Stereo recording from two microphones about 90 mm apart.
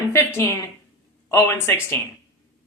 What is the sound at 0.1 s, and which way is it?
A woman's voice, 25° left (ahead or behind).